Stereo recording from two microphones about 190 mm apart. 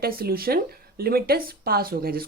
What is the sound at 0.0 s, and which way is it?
Speech, 50° right (ahead or behind).